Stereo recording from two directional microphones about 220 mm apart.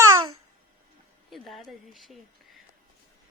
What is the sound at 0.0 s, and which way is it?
Babbling, 15° right (ahead or behind).